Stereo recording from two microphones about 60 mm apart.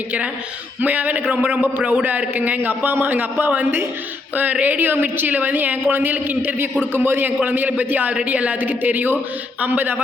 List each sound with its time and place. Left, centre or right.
0.8 s a man's voice: right